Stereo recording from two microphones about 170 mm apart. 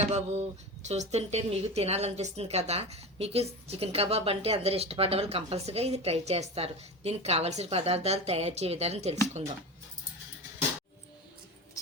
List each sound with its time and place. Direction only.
0.0 s speech: 40° right (ahead or behind)